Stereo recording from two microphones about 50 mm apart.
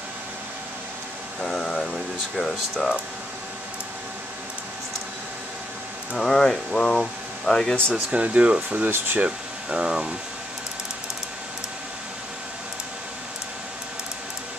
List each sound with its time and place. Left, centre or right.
1.4 s air conditioning: centre
2.3 s speech: centre
6.1 s speech: centre
8.1 s speech: right
9.2 s speech: centre